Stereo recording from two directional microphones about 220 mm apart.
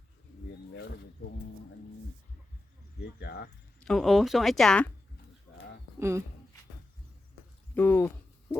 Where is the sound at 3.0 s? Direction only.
50° left (ahead or behind).